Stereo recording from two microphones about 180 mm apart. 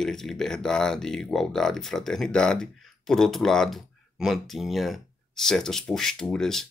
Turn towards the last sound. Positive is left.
turn(degrees=5)  # may be behind; listen again after turning